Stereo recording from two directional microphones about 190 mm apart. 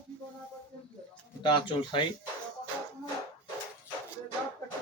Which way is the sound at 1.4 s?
25° left (ahead or behind).